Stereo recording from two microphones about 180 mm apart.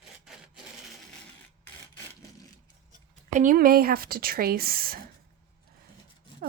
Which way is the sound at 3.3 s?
45° right (ahead or behind).